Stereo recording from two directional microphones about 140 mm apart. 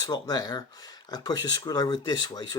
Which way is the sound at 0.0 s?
30° left (ahead or behind).